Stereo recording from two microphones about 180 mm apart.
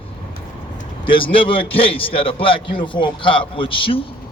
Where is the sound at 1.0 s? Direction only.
30° left (ahead or behind).